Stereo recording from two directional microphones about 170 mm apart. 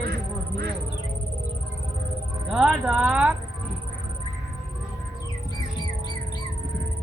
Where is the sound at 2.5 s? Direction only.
5° right (ahead or behind).